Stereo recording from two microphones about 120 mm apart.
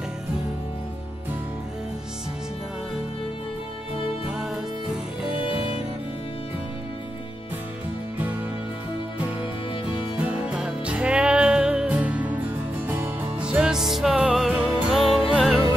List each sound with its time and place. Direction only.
9.9 s music: 10° right (ahead or behind)
15.0 s music: centre (ahead or behind)